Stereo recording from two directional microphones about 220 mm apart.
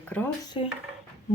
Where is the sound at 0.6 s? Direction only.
25° left (ahead or behind).